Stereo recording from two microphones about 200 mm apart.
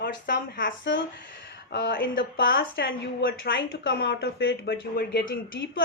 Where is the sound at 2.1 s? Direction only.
70° left (ahead or behind).